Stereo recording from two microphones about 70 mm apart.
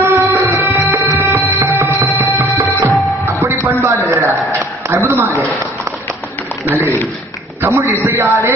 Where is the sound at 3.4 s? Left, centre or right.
Right.